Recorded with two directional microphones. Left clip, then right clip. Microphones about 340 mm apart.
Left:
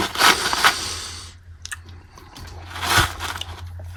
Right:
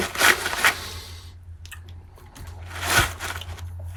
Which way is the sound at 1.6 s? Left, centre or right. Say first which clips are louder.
Left 9 dB; centre.